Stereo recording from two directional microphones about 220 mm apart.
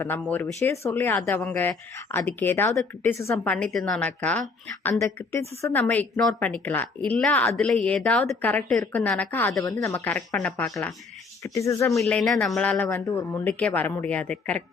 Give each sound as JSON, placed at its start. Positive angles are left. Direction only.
{"t": 0.0, "sound": "a woman's voice", "side_deg": 10}